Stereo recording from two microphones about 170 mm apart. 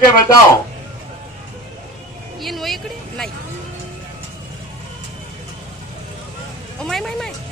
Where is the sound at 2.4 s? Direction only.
Centre (ahead or behind).